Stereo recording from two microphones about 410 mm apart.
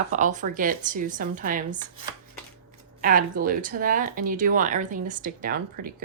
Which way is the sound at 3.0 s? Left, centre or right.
Centre.